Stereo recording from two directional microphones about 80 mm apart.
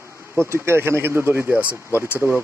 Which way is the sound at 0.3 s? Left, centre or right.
Right.